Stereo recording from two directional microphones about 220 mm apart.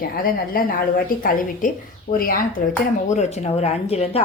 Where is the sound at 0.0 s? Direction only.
40° left (ahead or behind).